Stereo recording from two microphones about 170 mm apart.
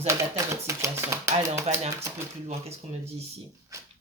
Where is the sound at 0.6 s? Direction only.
15° right (ahead or behind).